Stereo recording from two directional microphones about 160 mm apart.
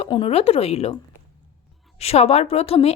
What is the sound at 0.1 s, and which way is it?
Speech, 35° left (ahead or behind).